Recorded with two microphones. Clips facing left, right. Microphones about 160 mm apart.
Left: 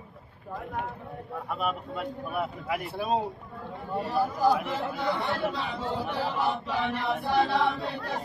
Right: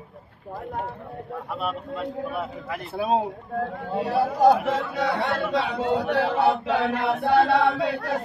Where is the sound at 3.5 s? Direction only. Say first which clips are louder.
Right 9 dB; 85° right.